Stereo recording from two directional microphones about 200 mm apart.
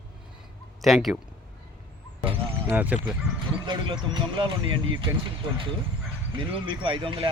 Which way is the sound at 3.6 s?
20° right (ahead or behind).